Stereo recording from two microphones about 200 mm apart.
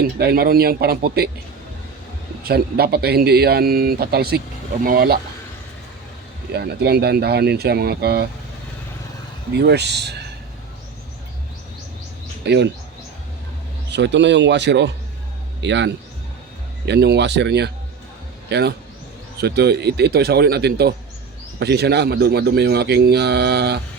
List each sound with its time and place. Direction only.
0.0 s speech: 50° right (ahead or behind)
2.4 s speech: 50° right (ahead or behind)
6.5 s speech: 55° right (ahead or behind)
9.5 s a man's voice: 55° right (ahead or behind)
12.5 s a man's voice: 60° right (ahead or behind)
13.9 s a man's voice: 60° right (ahead or behind)